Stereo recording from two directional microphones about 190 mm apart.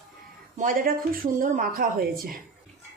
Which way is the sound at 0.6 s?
50° right (ahead or behind).